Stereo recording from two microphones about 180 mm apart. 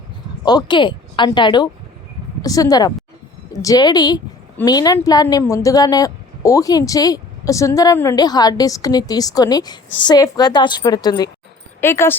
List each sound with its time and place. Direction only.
0.4 s speech: 25° left (ahead or behind)